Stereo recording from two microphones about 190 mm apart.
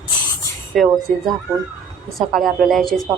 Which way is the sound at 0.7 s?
Centre (ahead or behind).